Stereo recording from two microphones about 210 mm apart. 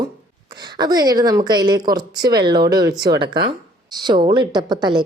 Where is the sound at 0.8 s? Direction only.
20° right (ahead or behind).